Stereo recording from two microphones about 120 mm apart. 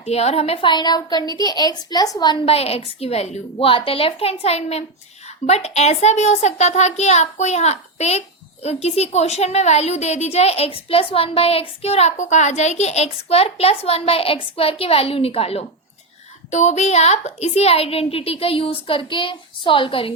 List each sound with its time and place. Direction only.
0.0 s a woman's voice: 60° left (ahead or behind)
0.7 s a woman's voice: 35° left (ahead or behind)
2.5 s a woman's voice: 55° left (ahead or behind)
3.7 s a woman's voice: 50° left (ahead or behind)
16.5 s a woman's voice: 80° left; by 20.1 s 50° left (ahead or behind)